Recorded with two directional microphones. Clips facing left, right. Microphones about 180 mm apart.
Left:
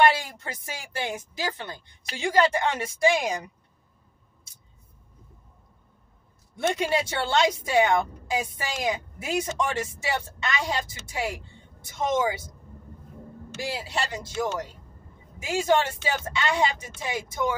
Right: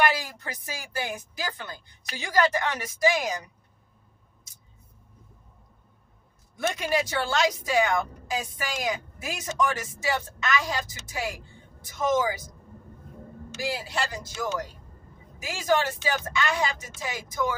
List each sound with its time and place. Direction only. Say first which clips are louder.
0.0 s a woman's voice: left 4 dB; 25° left (ahead or behind)
6.5 s a woman's voice: left 2 dB; 25° left (ahead or behind)
13.6 s a woman's voice: even; 25° left (ahead or behind)